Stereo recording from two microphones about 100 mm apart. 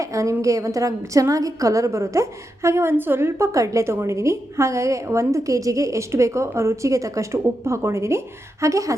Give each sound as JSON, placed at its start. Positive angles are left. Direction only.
{"t": 0.0, "sound": "a woman's voice", "side_deg": -30}